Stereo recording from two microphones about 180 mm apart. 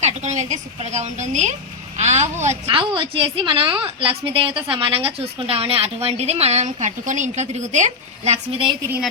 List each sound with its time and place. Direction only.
0.0 s a woman's voice: 40° right (ahead or behind)